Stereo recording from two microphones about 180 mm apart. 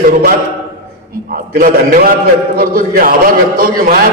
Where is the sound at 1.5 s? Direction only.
55° right (ahead or behind).